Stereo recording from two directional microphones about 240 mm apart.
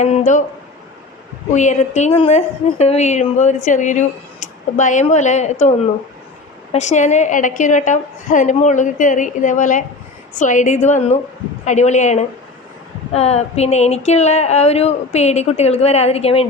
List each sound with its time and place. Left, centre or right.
0.0 s a man's voice: left
1.5 s a woman's voice: left
6.7 s a woman's voice: left